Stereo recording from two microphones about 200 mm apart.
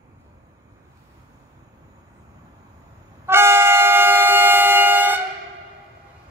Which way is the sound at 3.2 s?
10° right (ahead or behind).